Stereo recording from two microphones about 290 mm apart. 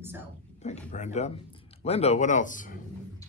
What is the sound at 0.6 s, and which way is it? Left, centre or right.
Speech, left.